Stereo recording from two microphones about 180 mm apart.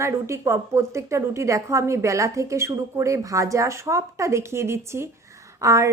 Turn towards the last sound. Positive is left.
turn(degrees=-15)  # may be behind; listen again after turning